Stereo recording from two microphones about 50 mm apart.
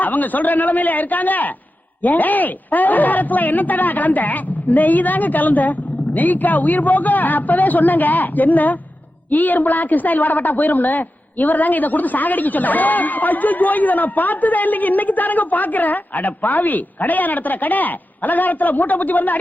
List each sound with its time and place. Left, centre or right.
0.0 s a woman's voice: left